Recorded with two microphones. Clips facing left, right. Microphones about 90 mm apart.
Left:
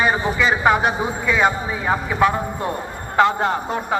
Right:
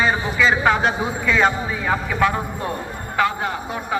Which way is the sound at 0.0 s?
20° left (ahead or behind).